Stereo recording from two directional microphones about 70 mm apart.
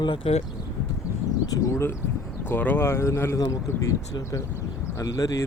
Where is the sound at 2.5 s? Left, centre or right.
Left.